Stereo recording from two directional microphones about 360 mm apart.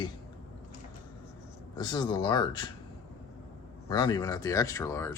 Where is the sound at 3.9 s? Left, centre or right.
Centre.